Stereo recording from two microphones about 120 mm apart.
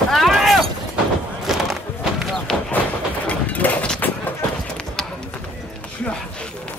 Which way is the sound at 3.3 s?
10° left (ahead or behind).